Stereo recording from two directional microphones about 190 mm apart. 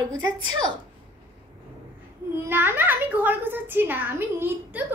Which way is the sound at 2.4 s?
10° right (ahead or behind).